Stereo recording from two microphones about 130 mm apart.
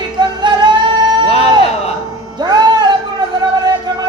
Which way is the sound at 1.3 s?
50° left (ahead or behind).